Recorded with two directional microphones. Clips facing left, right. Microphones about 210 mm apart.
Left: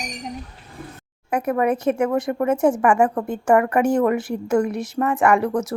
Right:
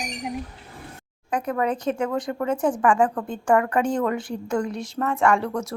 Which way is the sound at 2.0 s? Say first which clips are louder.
Left 5 dB; 25° left (ahead or behind).